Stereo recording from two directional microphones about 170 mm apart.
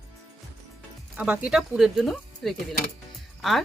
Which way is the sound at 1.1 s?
10° right (ahead or behind).